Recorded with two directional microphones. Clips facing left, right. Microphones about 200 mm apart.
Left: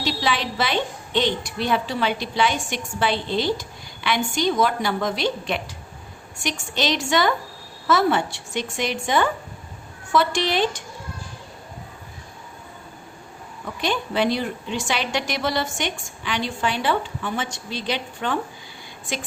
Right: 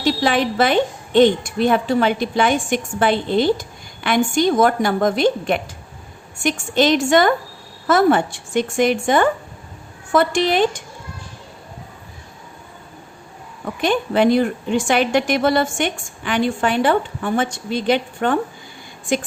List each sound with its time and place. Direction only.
0.0 s a woman's voice: 50° right (ahead or behind)
13.8 s a woman's voice: 50° right (ahead or behind)